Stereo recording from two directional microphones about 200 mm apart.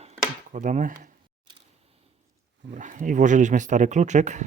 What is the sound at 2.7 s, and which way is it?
Speech, 40° right (ahead or behind).